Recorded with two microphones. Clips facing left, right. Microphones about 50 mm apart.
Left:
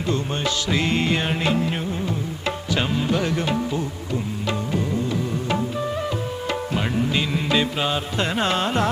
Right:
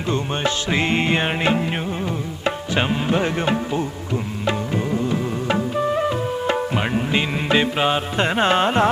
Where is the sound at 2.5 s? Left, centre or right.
Right.